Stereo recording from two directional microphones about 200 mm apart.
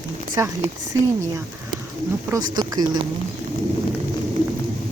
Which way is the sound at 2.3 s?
20° right (ahead or behind).